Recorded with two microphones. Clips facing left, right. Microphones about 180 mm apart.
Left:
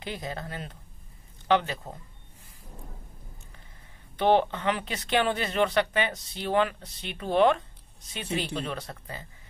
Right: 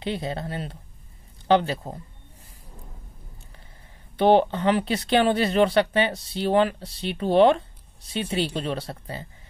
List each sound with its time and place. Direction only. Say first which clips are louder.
0.0 s speech: right 6 dB; 30° right (ahead or behind)
4.2 s speech: right 5 dB; 35° right (ahead or behind)